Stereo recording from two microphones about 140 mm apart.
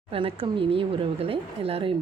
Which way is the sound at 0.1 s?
40° right (ahead or behind).